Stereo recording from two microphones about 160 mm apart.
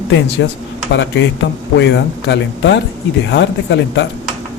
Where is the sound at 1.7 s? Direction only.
90° left.